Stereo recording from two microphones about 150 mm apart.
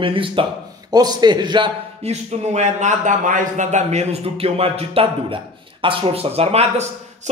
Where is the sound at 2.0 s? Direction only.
50° right (ahead or behind).